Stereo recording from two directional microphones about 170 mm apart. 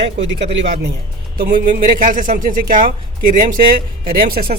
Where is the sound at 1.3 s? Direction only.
55° right (ahead or behind).